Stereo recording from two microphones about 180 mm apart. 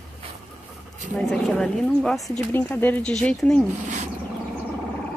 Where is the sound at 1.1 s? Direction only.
5° left (ahead or behind).